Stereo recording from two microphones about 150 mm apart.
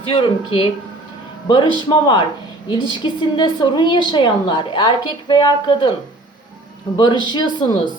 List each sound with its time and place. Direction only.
0.2 s a woman's voice: 40° left (ahead or behind)
6.9 s a woman's voice: 30° left (ahead or behind)